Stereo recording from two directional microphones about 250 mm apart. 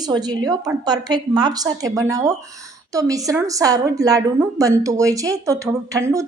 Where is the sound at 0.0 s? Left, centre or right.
Centre.